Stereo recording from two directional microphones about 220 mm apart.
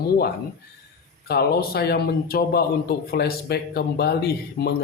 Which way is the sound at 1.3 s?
45° left (ahead or behind).